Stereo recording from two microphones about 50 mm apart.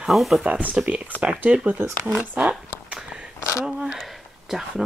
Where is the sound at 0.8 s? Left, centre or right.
Right.